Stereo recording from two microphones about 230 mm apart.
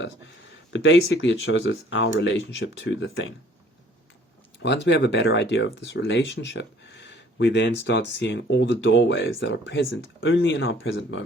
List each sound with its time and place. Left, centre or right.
0.7 s speech: left
4.6 s speech: left